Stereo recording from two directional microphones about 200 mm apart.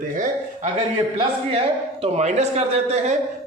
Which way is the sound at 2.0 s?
35° right (ahead or behind).